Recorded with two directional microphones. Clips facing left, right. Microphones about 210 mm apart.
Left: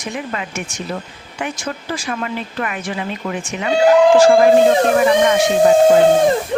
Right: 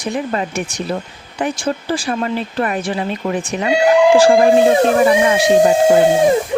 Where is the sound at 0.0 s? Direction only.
35° right (ahead or behind).